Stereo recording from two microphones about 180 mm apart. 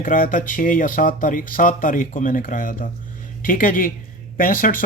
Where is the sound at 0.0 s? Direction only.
50° left (ahead or behind).